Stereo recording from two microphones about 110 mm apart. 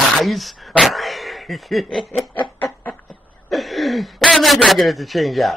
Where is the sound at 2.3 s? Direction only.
15° left (ahead or behind).